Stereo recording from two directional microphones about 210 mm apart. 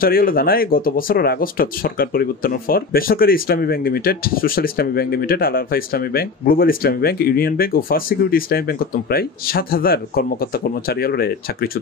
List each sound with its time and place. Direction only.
0.0 s speech: 45° left (ahead or behind)